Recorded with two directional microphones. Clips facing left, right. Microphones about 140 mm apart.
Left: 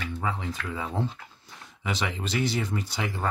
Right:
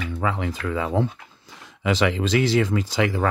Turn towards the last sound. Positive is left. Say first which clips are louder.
# right 9 dB
turn(degrees=-90)